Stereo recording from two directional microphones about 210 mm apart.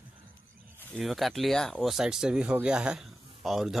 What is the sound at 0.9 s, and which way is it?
Speech, centre (ahead or behind).